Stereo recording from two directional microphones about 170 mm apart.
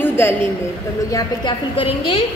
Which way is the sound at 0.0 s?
15° left (ahead or behind).